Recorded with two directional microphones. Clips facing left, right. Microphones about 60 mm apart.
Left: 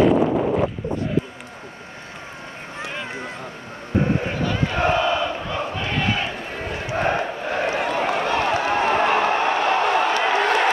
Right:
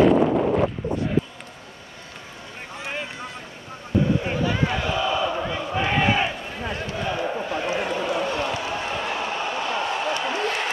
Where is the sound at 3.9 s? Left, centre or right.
Left.